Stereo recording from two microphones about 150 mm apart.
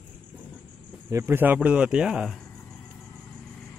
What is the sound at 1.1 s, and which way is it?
Speech, 15° right (ahead or behind).